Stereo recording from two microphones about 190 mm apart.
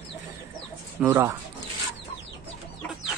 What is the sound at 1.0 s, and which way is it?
Speech, 15° right (ahead or behind).